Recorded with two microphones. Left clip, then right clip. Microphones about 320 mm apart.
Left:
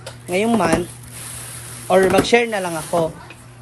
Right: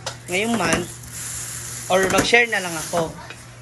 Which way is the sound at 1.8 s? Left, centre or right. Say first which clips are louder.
Left 3 dB; centre.